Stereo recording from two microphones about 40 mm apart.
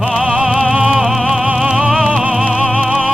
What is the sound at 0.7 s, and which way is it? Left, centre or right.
Music, right.